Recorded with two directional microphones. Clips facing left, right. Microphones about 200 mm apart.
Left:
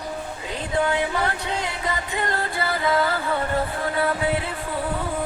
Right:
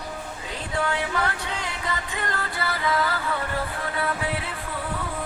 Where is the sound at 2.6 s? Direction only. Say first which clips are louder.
Left 3 dB; 25° left (ahead or behind).